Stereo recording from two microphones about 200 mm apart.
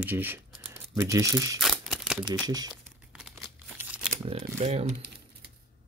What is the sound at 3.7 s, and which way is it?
Shuffling cards, 5° right (ahead or behind).